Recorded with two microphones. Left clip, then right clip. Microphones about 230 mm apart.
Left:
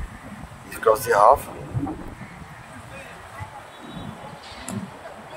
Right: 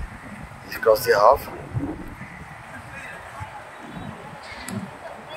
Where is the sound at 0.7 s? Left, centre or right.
Centre.